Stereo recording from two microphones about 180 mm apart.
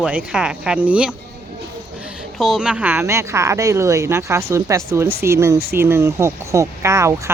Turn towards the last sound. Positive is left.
turn(degrees=-15)  # may be behind; listen again after turning